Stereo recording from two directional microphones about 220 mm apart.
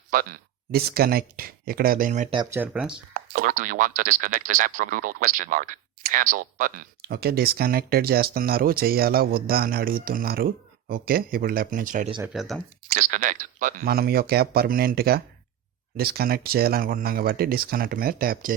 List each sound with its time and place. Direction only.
0.1 s speech: 40° right (ahead or behind)
2.3 s speech: 15° right (ahead or behind)
3.2 s speech: 40° right (ahead or behind)
12.3 s speech: centre (ahead or behind)
12.9 s speech: 40° right (ahead or behind)